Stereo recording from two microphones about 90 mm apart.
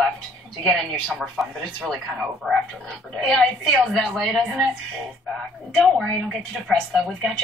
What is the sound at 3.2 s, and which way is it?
Speech, 5° left (ahead or behind).